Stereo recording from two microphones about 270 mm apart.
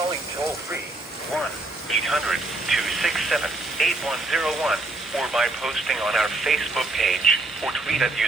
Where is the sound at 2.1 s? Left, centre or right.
Centre.